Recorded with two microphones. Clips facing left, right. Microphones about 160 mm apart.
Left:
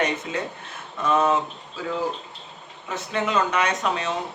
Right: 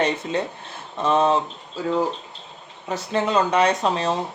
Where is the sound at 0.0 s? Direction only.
30° right (ahead or behind).